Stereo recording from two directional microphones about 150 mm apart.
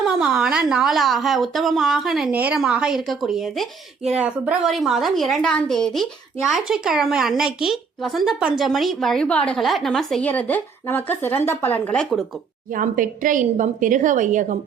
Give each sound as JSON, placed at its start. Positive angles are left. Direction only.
{"t": 0.0, "sound": "a woman's voice", "side_deg": -5}
{"t": 12.7, "sound": "a woman's voice", "side_deg": -65}